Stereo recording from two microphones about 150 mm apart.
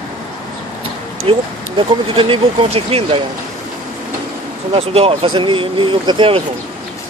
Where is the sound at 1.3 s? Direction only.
35° right (ahead or behind).